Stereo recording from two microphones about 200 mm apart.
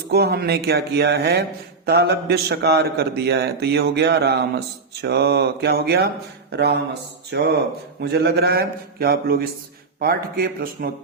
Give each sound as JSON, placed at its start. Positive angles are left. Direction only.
{"t": 0.1, "sound": "a man's voice", "side_deg": -55}